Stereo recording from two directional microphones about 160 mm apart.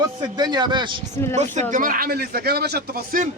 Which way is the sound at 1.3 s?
50° right (ahead or behind).